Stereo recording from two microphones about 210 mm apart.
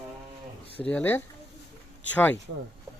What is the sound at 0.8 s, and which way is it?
Speech, 5° left (ahead or behind).